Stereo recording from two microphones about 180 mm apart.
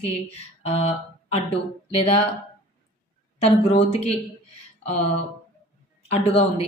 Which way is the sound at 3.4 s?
35° left (ahead or behind).